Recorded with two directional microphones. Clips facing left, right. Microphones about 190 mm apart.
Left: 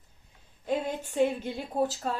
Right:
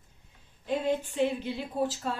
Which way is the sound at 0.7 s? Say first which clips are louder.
Right 2 dB; 45° left (ahead or behind).